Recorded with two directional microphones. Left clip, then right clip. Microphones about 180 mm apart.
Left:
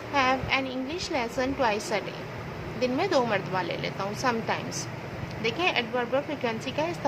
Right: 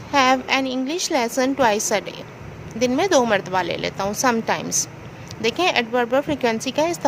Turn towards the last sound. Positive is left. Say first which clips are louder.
# right 9 dB
turn(degrees=-55)  # may be behind; listen again after turning